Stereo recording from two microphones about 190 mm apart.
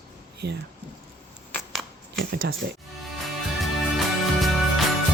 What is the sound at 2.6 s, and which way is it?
Speech, 60° right (ahead or behind).